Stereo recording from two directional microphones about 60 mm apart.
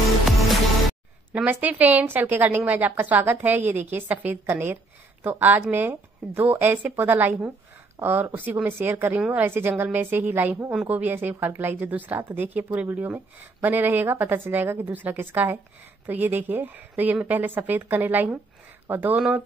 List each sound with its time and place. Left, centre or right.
0.4 s music: centre
1.3 s a woman's voice: right